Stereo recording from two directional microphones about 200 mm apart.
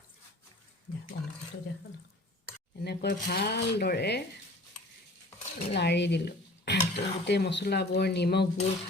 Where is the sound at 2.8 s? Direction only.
55° left (ahead or behind).